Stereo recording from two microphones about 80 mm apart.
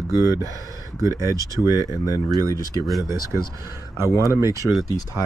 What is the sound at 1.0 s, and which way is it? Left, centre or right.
Speech, right.